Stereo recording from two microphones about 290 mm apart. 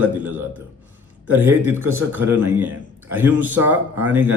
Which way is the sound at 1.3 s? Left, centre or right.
Centre.